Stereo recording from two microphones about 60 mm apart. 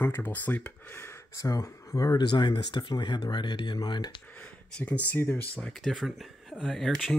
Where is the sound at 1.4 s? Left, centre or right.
Left.